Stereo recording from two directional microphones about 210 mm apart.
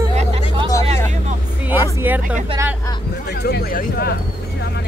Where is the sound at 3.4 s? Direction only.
50° left (ahead or behind).